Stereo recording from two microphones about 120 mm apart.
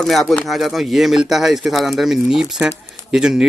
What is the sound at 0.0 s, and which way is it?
Speech, centre (ahead or behind).